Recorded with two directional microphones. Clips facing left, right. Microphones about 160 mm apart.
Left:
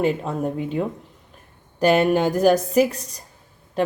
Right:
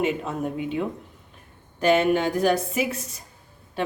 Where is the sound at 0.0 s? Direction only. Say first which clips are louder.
Left 3 dB; 35° left (ahead or behind).